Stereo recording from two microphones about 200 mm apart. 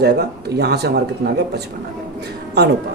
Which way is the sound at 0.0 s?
55° right (ahead or behind).